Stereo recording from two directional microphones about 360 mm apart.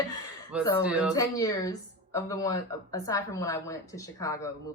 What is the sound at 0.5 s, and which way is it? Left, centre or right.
Speech, centre.